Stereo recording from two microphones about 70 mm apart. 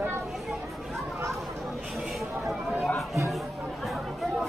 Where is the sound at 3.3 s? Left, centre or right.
Centre.